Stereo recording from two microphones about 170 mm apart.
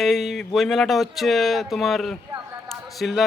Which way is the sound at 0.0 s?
Centre (ahead or behind).